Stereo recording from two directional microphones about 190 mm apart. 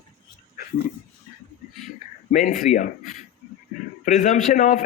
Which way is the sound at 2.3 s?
40° left (ahead or behind).